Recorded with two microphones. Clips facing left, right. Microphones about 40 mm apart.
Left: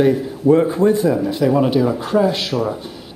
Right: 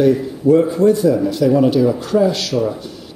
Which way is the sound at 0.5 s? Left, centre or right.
Left.